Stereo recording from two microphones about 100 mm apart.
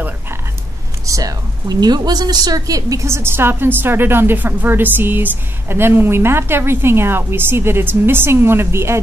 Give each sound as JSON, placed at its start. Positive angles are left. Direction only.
{"t": 1.0, "sound": "a woman's voice", "side_deg": -35}